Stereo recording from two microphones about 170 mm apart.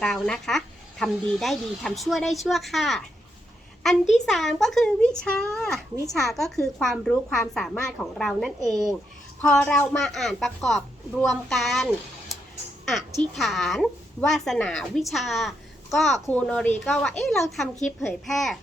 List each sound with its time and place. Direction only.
0.0 s speech: 5° left (ahead or behind)
4.1 s speech: centre (ahead or behind)
8.6 s speech: 20° right (ahead or behind)
9.4 s speech: 5° left (ahead or behind)
12.9 s a woman's voice: centre (ahead or behind)